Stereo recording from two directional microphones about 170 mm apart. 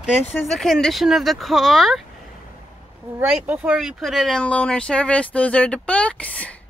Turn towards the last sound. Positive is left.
turn(degrees=10)  # may be behind; listen again after turning